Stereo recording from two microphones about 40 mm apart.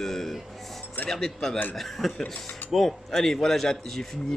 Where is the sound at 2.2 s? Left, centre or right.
Centre.